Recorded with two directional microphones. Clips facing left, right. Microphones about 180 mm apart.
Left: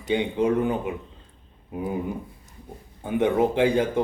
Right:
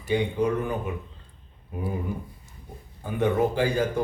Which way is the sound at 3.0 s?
20° left (ahead or behind).